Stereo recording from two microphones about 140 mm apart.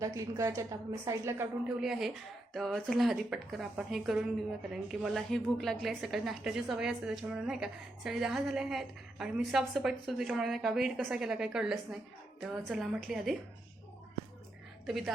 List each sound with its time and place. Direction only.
0.0 s a woman's voice: 25° right (ahead or behind)
1.6 s a woman's voice: centre (ahead or behind)
14.8 s a woman's voice: centre (ahead or behind)